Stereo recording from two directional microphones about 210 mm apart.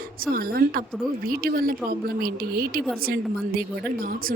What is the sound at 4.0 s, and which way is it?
Speech, 45° right (ahead or behind).